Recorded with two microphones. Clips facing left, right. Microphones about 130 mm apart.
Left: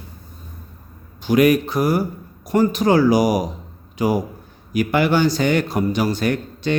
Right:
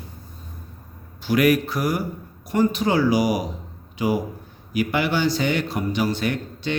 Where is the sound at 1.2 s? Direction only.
20° left (ahead or behind).